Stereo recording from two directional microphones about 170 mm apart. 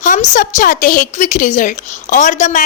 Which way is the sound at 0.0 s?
45° left (ahead or behind).